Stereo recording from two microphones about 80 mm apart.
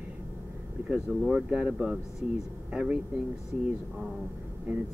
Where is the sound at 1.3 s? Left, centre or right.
Centre.